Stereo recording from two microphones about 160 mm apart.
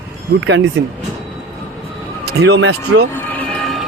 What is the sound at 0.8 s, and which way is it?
Speech, 90° right.